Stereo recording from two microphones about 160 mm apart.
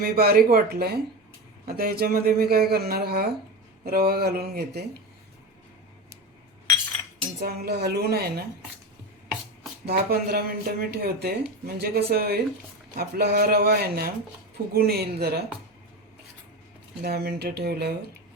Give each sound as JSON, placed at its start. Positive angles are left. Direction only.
{"t": 0.0, "sound": "speech", "side_deg": -70}
{"t": 7.4, "sound": "a woman's voice", "side_deg": -85}
{"t": 9.8, "sound": "a woman's voice", "side_deg": -75}
{"t": 17.0, "sound": "speech", "side_deg": -85}